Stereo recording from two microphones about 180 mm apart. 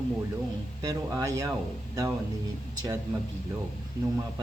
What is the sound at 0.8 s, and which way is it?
Speech, 20° right (ahead or behind).